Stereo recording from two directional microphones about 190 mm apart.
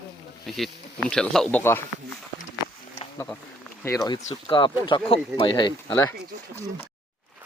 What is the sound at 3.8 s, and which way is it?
Speech, 15° left (ahead or behind).